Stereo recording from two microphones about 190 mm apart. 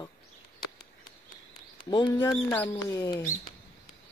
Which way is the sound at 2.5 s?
10° left (ahead or behind).